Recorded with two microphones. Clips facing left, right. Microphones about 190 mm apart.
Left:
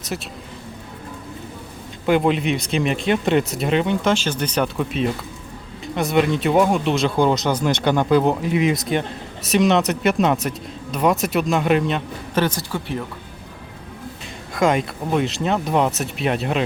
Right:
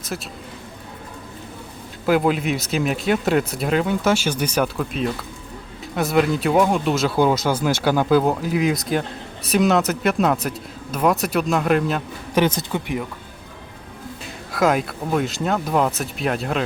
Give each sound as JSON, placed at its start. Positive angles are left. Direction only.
{"t": 0.1, "sound": "speech", "side_deg": 0}
{"t": 2.0, "sound": "speech", "side_deg": 0}
{"t": 12.3, "sound": "speech", "side_deg": -20}
{"t": 14.5, "sound": "speech", "side_deg": 0}